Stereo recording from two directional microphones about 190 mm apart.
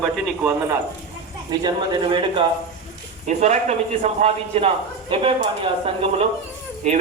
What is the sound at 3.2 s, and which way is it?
A man's voice, 35° right (ahead or behind).